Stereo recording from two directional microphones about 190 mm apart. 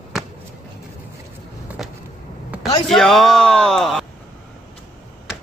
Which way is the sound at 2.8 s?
Centre (ahead or behind).